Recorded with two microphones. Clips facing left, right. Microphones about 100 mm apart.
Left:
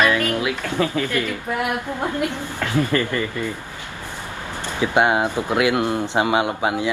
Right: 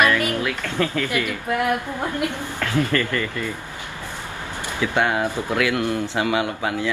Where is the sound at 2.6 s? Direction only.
15° left (ahead or behind).